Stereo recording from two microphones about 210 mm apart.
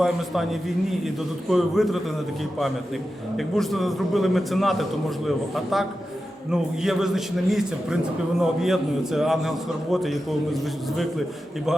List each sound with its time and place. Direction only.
0.0 s a man's voice: centre (ahead or behind)